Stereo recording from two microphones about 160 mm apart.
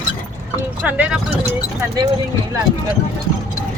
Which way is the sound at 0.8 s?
10° right (ahead or behind).